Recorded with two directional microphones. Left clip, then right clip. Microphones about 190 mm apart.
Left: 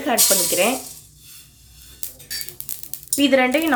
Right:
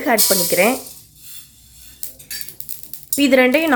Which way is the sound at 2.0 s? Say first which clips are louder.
Left 1 dB; 10° left (ahead or behind).